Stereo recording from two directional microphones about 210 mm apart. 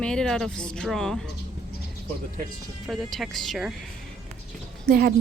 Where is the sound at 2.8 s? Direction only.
Centre (ahead or behind).